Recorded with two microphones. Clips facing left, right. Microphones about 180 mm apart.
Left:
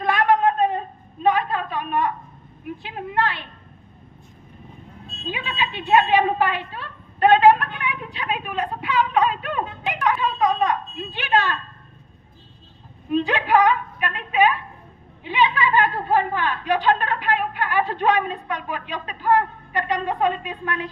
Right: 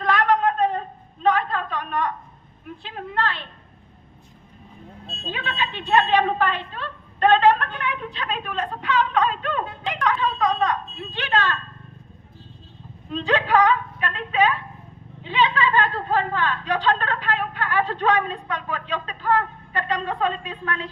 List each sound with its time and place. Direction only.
0.0 s a sound: 15° left (ahead or behind)
2.6 s speech: 15° left (ahead or behind)
5.3 s a woman's voice: 15° left (ahead or behind)
13.1 s speech: 15° left (ahead or behind)